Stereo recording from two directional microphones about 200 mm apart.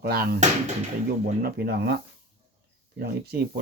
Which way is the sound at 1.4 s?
50° right (ahead or behind).